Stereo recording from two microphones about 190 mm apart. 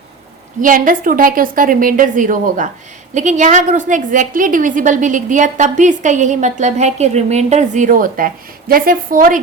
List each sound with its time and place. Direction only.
0.6 s a woman's voice: 45° right (ahead or behind)